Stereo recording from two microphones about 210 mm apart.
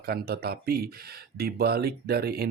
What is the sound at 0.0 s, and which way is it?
Speech, 45° right (ahead or behind).